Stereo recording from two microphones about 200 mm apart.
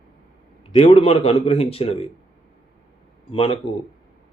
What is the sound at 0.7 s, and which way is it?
A man's voice, 30° left (ahead or behind).